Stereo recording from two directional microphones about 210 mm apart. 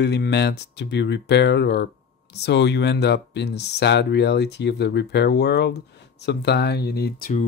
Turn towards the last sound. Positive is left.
turn(degrees=40)  # may be behind; listen again after turning